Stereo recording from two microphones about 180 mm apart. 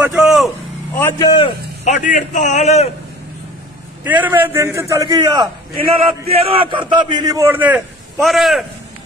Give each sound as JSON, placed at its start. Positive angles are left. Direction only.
{"t": 0.1, "sound": "vehicle", "side_deg": 0}
{"t": 0.9, "sound": "a man's voice", "side_deg": 15}
{"t": 1.9, "sound": "a man's voice", "side_deg": 45}
{"t": 4.0, "sound": "a man's voice", "side_deg": -10}
{"t": 5.9, "sound": "a man's voice", "side_deg": -35}